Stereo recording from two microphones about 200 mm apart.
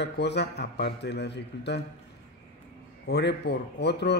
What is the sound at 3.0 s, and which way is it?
A man's voice, 55° left (ahead or behind).